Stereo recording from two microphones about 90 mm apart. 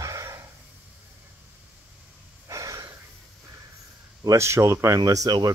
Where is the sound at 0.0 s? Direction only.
35° right (ahead or behind).